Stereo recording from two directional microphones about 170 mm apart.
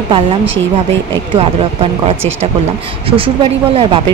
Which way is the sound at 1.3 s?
35° right (ahead or behind).